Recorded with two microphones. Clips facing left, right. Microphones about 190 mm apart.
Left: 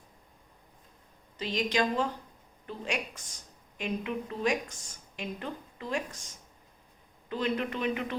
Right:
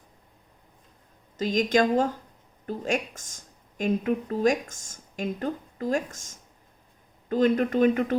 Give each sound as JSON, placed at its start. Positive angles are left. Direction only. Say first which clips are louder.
{"t": 1.4, "sound": "a woman's voice", "louder": "right 7 dB", "side_deg": -45}